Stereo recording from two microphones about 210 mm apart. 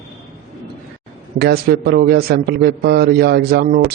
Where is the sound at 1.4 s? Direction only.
50° right (ahead or behind).